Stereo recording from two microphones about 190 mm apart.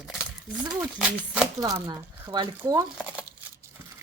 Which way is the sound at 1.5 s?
20° right (ahead or behind).